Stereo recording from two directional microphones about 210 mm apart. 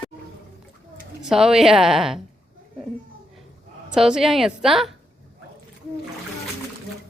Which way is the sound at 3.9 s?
5° right (ahead or behind).